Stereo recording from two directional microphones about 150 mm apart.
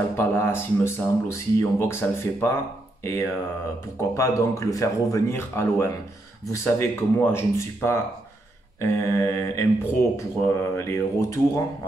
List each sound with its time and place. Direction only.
0.1 s speech: 15° left (ahead or behind)